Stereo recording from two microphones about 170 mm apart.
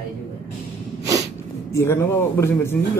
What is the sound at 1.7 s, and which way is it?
Speech, 15° left (ahead or behind).